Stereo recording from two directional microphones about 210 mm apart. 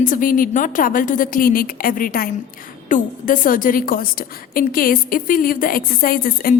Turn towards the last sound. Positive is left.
turn(degrees=45)  # may be behind; listen again after turning